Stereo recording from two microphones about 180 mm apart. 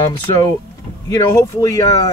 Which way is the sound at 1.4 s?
15° left (ahead or behind).